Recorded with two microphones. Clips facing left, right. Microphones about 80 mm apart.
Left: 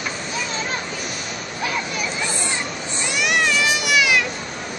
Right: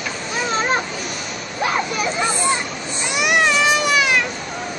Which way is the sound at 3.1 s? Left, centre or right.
Right.